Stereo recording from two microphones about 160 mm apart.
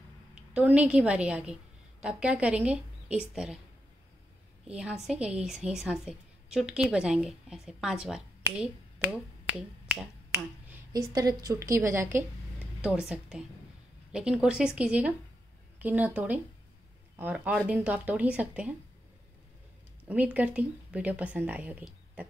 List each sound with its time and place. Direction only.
0.6 s a woman's voice: 5° right (ahead or behind)
4.6 s a woman's voice: 5° right (ahead or behind)
10.9 s a woman's voice: 25° right (ahead or behind); by 18.8 s 10° right (ahead or behind)
20.1 s a woman's voice: 10° right (ahead or behind)